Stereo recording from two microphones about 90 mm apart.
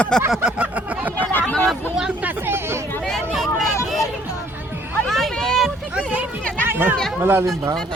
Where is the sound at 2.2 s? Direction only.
25° right (ahead or behind).